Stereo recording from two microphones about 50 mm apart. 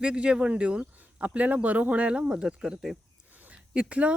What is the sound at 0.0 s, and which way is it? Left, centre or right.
Speech, centre.